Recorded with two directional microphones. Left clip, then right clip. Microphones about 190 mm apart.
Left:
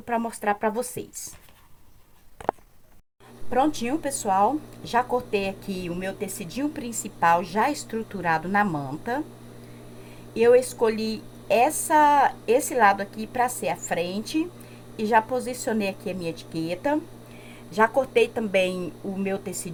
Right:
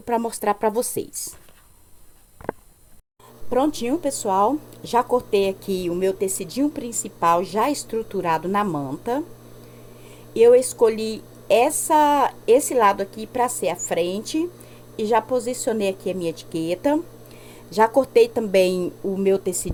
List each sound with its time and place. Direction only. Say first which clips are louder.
0.3 s a woman's voice: right 3 dB; 45° right (ahead or behind)
3.5 s speech: right 2 dB; 40° right (ahead or behind)
10.3 s a woman's voice: right 4 dB; 35° right (ahead or behind)